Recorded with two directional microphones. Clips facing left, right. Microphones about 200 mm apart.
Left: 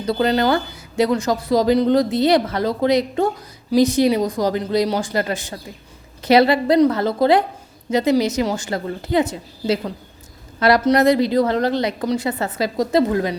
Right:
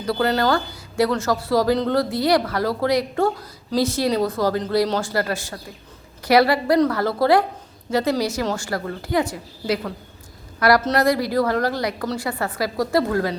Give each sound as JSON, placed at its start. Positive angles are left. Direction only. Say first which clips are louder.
{"t": 0.0, "sound": "a woman's voice", "louder": "left 2 dB", "side_deg": 20}